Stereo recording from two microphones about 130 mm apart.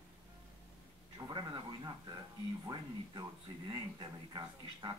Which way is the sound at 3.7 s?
35° right (ahead or behind).